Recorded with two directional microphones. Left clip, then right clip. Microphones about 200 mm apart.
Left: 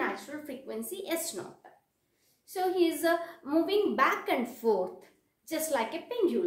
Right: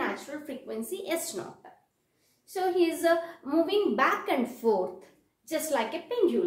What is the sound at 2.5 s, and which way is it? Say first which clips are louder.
A woman's voice: right 2 dB; 20° left (ahead or behind).